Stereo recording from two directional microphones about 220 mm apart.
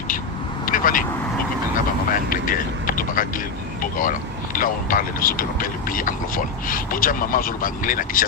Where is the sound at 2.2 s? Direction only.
40° left (ahead or behind).